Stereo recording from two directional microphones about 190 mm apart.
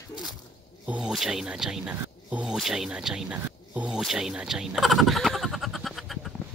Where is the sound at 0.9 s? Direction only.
5° right (ahead or behind).